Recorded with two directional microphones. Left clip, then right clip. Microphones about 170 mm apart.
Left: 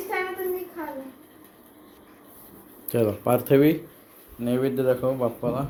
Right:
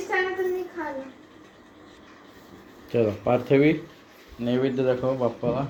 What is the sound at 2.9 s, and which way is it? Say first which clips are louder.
Speech: even; 25° left (ahead or behind).